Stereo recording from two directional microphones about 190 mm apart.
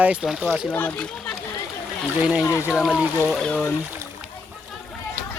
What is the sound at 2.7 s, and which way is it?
Speech, 5° right (ahead or behind).